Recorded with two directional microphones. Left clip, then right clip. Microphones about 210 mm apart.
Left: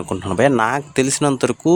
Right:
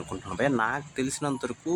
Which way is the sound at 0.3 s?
45° left (ahead or behind).